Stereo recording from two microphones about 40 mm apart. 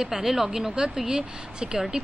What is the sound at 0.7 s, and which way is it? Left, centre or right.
Speech, right.